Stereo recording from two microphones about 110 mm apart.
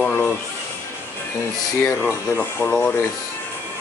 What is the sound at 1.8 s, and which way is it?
Speech, 20° left (ahead or behind).